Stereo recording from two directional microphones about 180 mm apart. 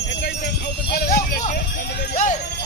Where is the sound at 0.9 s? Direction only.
55° left (ahead or behind).